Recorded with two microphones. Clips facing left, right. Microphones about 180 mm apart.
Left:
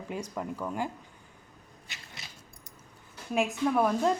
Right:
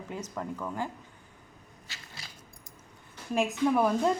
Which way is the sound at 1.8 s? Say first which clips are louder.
Even; 20° left (ahead or behind).